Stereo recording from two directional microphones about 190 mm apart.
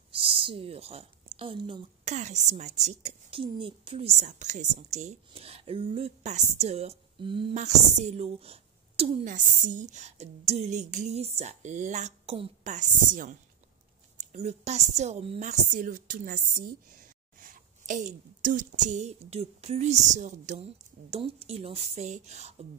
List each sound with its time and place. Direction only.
0.1 s speech: 30° right (ahead or behind)
2.0 s a woman's voice: 35° right (ahead or behind)
7.5 s a woman's voice: 35° right (ahead or behind)
17.4 s a woman's voice: 45° right (ahead or behind)